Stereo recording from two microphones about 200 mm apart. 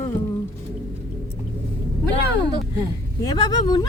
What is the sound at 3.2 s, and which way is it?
Speech, 20° left (ahead or behind).